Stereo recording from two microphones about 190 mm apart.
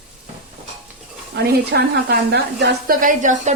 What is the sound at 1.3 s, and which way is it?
Speech, 60° right (ahead or behind).